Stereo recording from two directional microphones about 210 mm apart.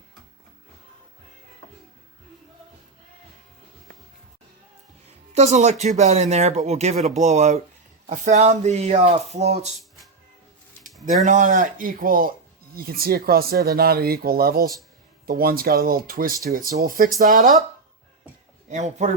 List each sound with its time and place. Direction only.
5.3 s speech: 30° right (ahead or behind)
11.3 s speech: 35° right (ahead or behind)
18.7 s speech: 35° right (ahead or behind)